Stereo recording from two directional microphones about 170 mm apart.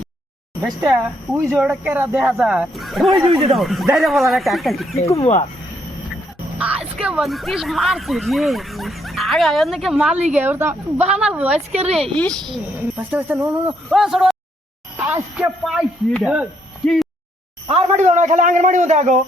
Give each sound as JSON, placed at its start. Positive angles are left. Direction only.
{"t": 0.6, "sound": "speech", "side_deg": -5}
{"t": 5.2, "sound": "speech", "side_deg": 35}
{"t": 6.6, "sound": "speech", "side_deg": -5}
{"t": 11.7, "sound": "speech", "side_deg": -40}
{"t": 11.9, "sound": "speech", "side_deg": 5}
{"t": 13.0, "sound": "speech", "side_deg": -10}
{"t": 14.9, "sound": "a sound", "side_deg": -10}
{"t": 15.6, "sound": "speech", "side_deg": 0}
{"t": 17.7, "sound": "a man's voice", "side_deg": -40}